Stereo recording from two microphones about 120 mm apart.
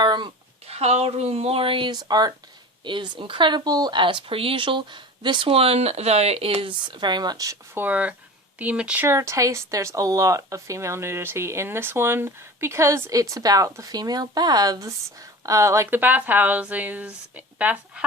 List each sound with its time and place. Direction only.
0.0 s a sound: 35° right (ahead or behind)
0.7 s speech: 65° right (ahead or behind); by 9.0 s 10° right (ahead or behind)
9.0 s speech: 25° right (ahead or behind)